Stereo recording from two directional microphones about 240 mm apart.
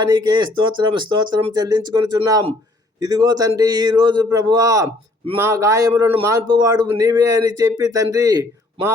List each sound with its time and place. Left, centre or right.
0.0 s a man's voice: centre